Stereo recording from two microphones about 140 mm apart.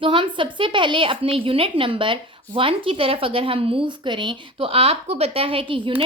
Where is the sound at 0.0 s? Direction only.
40° right (ahead or behind).